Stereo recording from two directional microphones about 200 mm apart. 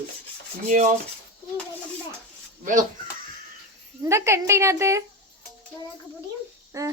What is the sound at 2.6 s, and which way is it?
Dishes, 40° right (ahead or behind).